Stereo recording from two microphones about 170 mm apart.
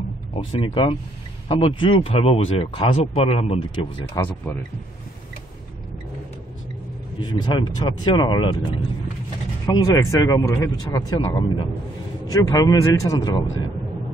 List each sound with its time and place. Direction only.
0.3 s speech: 35° left (ahead or behind)
7.2 s speech: 25° left (ahead or behind)
9.8 s speech: 20° left (ahead or behind)